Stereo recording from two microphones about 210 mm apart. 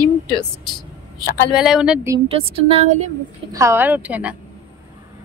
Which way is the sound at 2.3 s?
25° right (ahead or behind).